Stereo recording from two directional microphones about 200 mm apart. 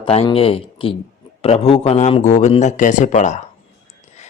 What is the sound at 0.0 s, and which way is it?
A man's voice, 25° left (ahead or behind).